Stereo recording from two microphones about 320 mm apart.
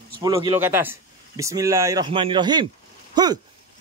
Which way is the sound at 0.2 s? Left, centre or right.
Centre.